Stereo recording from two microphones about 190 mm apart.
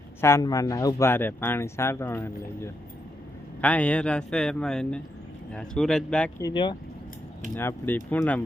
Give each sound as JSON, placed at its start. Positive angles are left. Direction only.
{"t": 0.2, "sound": "speech", "side_deg": 15}
{"t": 6.4, "sound": "speech", "side_deg": 25}
{"t": 7.5, "sound": "speech", "side_deg": 10}